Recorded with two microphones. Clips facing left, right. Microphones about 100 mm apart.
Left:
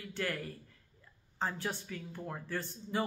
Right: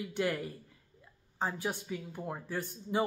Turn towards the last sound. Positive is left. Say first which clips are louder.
# right 3 dB
turn(degrees=-15)  # may be behind; listen again after turning